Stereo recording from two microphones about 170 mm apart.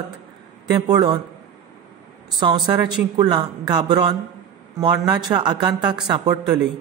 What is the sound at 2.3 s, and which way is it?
Speech, 25° right (ahead or behind).